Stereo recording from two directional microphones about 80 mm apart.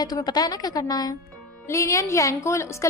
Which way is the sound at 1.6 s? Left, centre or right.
Left.